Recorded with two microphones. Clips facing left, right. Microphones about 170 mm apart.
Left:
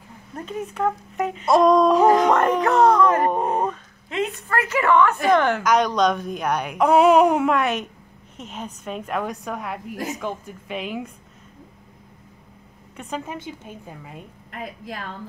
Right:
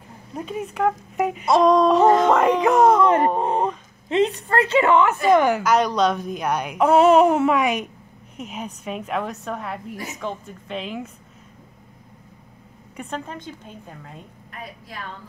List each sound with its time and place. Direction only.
0.4 s a woman's voice: 5° right (ahead or behind)
13.1 s a woman's voice: 5° left (ahead or behind)